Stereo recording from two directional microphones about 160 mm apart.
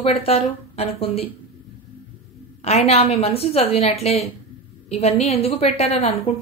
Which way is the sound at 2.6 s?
40° left (ahead or behind).